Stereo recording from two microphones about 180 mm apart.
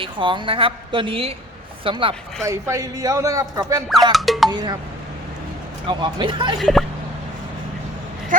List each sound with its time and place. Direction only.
0.0 s a woman's voice: 25° right (ahead or behind)
2.4 s a man's voice: 15° right (ahead or behind)
4.1 s speech: centre (ahead or behind)
4.4 s a woman's voice: 20° right (ahead or behind)
5.9 s a woman's voice: 25° right (ahead or behind)
6.6 s speech: centre (ahead or behind)
8.3 s speech: 50° right (ahead or behind)